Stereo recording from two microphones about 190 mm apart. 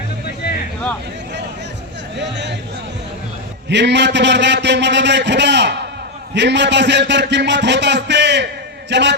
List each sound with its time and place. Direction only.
2.1 s speech: 65° right (ahead or behind)
3.7 s a man's voice: 65° right (ahead or behind)